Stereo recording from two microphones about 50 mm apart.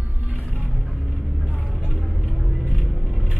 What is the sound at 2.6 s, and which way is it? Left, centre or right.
Vehicle, right.